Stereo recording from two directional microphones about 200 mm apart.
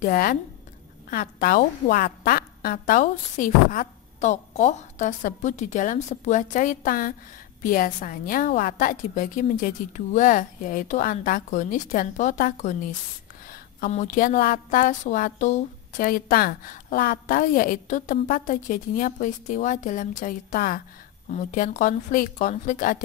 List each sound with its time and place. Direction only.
0.0 s a woman's voice: 45° left (ahead or behind)